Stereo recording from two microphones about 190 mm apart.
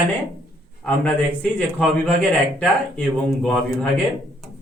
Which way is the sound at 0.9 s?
10° left (ahead or behind).